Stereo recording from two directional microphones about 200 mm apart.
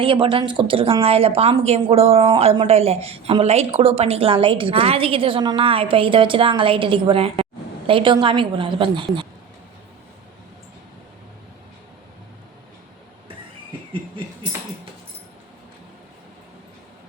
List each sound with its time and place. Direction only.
0.0 s a woman's voice: 25° right (ahead or behind)